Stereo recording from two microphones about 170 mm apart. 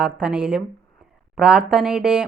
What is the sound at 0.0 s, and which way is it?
Speech, 5° right (ahead or behind).